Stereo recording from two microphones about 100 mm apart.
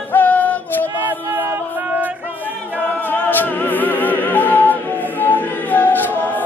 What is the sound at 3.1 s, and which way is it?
Music, 20° left (ahead or behind).